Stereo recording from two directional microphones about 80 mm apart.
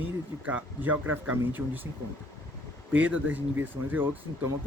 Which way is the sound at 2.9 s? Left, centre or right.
Centre.